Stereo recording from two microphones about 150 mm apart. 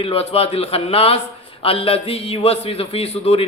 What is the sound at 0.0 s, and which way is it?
A man's voice, 40° left (ahead or behind).